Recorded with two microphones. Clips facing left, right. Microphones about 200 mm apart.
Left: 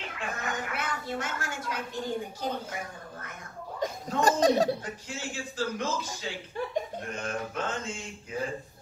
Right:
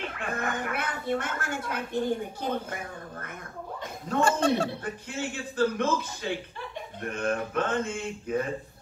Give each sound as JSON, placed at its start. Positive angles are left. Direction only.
{"t": 0.2, "sound": "speech", "side_deg": -55}
{"t": 4.2, "sound": "speech", "side_deg": 40}
{"t": 4.8, "sound": "a man's voice", "side_deg": -60}